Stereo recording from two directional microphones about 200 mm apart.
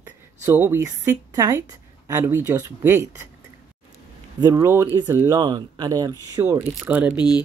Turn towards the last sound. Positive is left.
turn(degrees=20)  # may be behind; listen again after turning